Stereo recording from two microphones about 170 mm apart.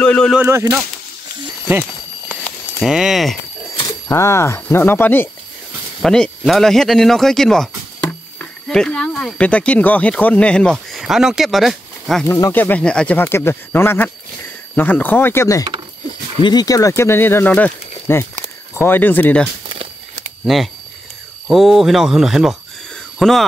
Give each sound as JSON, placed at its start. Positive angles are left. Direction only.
{"t": 0.0, "sound": "a sound", "side_deg": 5}
{"t": 0.4, "sound": "speech", "side_deg": -15}
{"t": 2.8, "sound": "speech", "side_deg": -5}
{"t": 3.8, "sound": "speech", "side_deg": 15}
{"t": 12.3, "sound": "speech", "side_deg": 15}